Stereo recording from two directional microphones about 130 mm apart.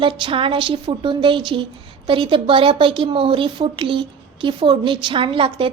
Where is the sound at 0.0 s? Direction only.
40° right (ahead or behind).